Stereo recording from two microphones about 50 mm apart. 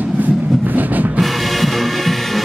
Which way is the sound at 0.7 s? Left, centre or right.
Right.